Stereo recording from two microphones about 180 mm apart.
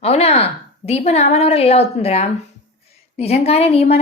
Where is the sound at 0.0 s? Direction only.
35° left (ahead or behind).